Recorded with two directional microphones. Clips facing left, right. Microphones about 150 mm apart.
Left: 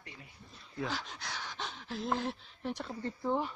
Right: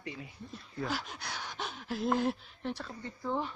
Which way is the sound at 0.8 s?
10° right (ahead or behind).